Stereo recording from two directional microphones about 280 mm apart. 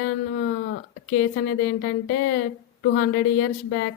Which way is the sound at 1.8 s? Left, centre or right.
Left.